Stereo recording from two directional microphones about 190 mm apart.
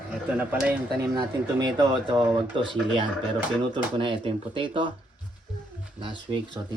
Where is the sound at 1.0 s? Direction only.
20° right (ahead or behind).